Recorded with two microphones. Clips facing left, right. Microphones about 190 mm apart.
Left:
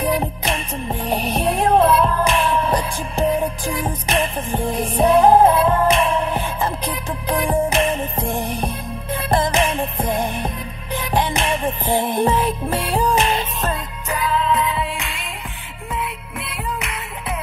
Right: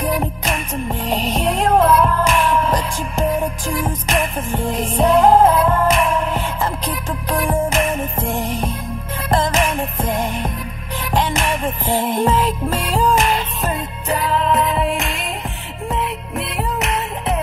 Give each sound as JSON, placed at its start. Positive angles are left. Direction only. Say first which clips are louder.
{"t": 1.7, "sound": "music", "louder": "right 1 dB", "side_deg": 25}
{"t": 3.8, "sound": "music", "louder": "even", "side_deg": 25}
{"t": 9.3, "sound": "music", "louder": "right 1 dB", "side_deg": 25}
{"t": 11.1, "sound": "music", "louder": "right 1 dB", "side_deg": 25}
{"t": 14.0, "sound": "music", "louder": "right 2 dB", "side_deg": -40}